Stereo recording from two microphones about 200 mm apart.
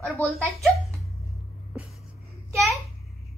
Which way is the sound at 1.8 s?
Centre (ahead or behind).